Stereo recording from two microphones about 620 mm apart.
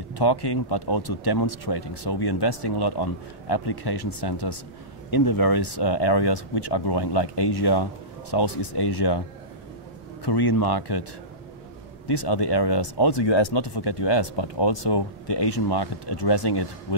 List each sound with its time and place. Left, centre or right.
0.2 s speech: left
10.2 s speech: left
12.1 s speech: left